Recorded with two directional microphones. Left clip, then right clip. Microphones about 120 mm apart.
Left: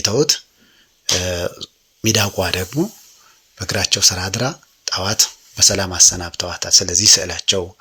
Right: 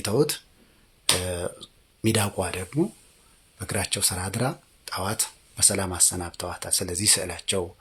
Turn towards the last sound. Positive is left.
turn(degrees=15)  # may be behind; listen again after turning